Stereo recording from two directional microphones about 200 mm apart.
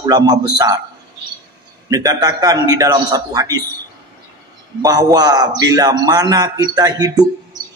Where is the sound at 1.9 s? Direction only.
15° right (ahead or behind).